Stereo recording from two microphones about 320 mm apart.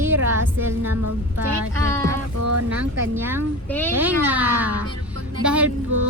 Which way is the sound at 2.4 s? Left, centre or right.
Right.